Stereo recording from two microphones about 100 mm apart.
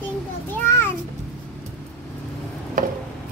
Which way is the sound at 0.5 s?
20° left (ahead or behind).